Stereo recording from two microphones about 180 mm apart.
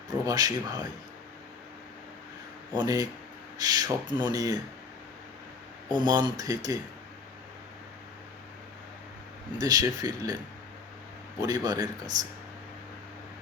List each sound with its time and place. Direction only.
0.3 s speech: 20° right (ahead or behind)
2.7 s speech: 20° right (ahead or behind)
6.0 s speech: 25° right (ahead or behind)
9.6 s speech: 20° right (ahead or behind)
11.3 s speech: 20° right (ahead or behind)